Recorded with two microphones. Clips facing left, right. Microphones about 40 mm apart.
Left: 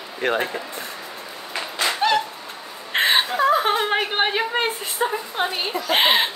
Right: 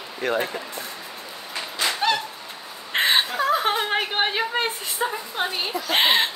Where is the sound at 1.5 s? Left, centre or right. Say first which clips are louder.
Left 2 dB; centre.